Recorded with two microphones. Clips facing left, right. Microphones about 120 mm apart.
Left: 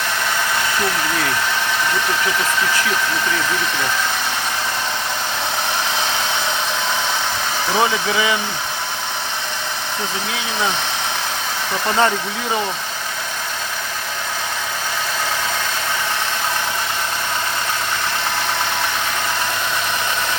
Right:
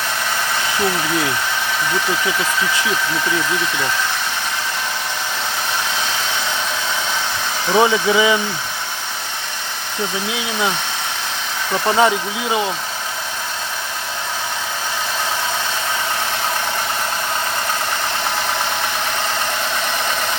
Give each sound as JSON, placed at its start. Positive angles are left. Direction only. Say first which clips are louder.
{"t": 7.8, "sound": "speech", "louder": "right 5 dB", "side_deg": -20}
{"t": 11.9, "sound": "speech", "louder": "right 1 dB", "side_deg": -10}